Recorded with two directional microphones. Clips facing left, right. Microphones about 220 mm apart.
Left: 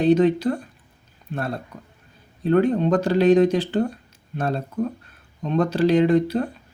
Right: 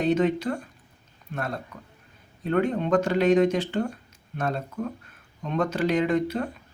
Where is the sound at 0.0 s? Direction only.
35° left (ahead or behind).